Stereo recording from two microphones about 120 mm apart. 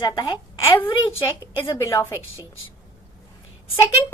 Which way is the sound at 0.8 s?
45° left (ahead or behind).